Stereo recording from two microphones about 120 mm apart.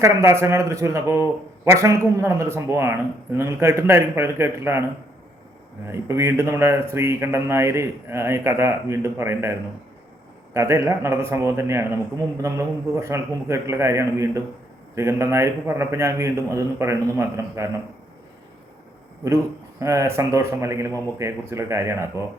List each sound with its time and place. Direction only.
0.0 s a man's voice: 25° right (ahead or behind)
5.9 s a man's voice: 25° right (ahead or behind)
19.8 s a man's voice: 25° right (ahead or behind)